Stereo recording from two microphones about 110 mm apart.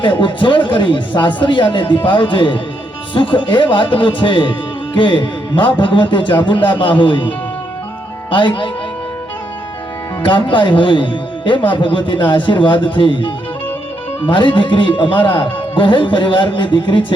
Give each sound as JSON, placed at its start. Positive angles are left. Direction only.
{"t": 0.0, "sound": "a man's voice", "side_deg": 50}
{"t": 10.2, "sound": "a man's voice", "side_deg": 50}